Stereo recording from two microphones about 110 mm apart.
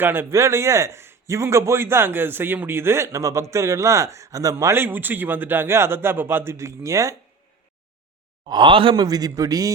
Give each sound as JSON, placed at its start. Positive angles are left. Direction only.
{"t": 0.0, "sound": "a man's voice", "side_deg": -20}
{"t": 4.5, "sound": "a man's voice", "side_deg": -20}
{"t": 8.4, "sound": "speech", "side_deg": -45}
{"t": 9.0, "sound": "speech", "side_deg": -35}